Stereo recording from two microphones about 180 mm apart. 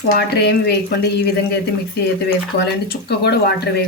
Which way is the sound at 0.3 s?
65° left (ahead or behind).